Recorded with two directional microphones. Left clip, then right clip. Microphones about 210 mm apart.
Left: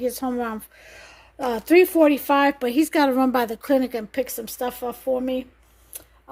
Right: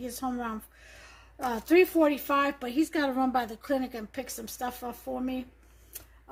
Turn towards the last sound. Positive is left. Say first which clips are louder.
# left 11 dB
turn(degrees=45)  # may be behind; listen again after turning